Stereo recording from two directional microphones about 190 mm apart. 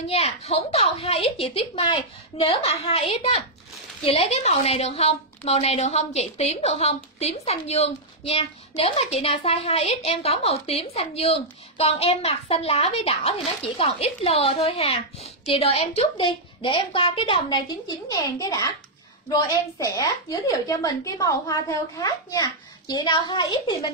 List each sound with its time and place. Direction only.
0.1 s a woman's voice: 30° left (ahead or behind)
19.8 s a woman's voice: 20° left (ahead or behind)